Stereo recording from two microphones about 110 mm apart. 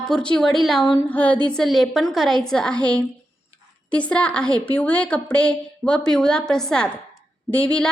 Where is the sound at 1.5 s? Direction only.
5° left (ahead or behind).